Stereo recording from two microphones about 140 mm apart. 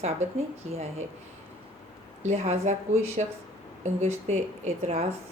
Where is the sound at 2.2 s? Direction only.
50° right (ahead or behind).